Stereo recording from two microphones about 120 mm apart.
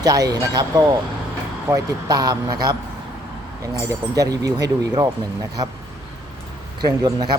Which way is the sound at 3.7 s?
30° right (ahead or behind).